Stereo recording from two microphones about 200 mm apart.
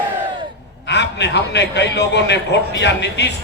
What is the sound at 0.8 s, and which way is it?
A man's voice, 60° left (ahead or behind).